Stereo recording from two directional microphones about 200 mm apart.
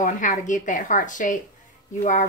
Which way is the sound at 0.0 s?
40° left (ahead or behind).